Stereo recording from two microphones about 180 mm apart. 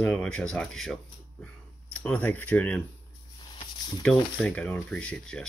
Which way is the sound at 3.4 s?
25° left (ahead or behind).